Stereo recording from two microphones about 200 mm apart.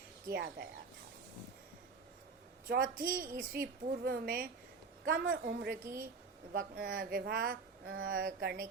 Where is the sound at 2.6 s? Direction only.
45° right (ahead or behind).